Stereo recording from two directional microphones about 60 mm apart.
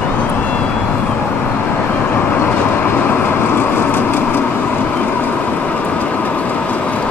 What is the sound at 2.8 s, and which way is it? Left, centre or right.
Vehicle, left.